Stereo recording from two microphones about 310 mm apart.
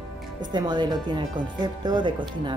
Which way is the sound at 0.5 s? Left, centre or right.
Centre.